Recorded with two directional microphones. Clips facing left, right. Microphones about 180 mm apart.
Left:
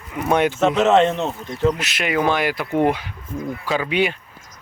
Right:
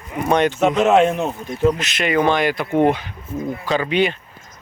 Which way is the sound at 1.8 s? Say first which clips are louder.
Right 3 dB; 10° left (ahead or behind).